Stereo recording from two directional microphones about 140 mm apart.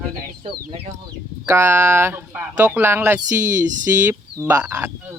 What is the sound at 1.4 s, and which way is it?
Speech, 20° right (ahead or behind).